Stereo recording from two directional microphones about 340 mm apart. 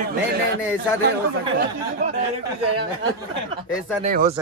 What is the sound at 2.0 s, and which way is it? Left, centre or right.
Speech, right.